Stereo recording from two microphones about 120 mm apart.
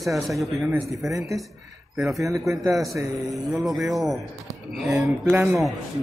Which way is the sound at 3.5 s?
Centre (ahead or behind).